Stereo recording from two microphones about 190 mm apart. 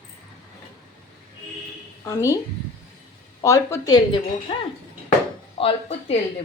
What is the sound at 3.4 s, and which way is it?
A woman's voice, 15° left (ahead or behind).